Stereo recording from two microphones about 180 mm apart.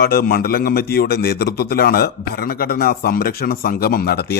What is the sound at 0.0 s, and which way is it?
Speech, 55° left (ahead or behind).